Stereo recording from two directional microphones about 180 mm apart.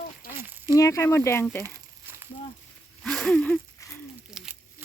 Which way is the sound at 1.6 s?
20° right (ahead or behind).